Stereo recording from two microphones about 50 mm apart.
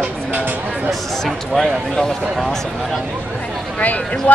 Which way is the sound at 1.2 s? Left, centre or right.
Centre.